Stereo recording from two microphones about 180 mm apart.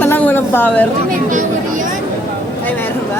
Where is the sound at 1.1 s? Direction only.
45° right (ahead or behind).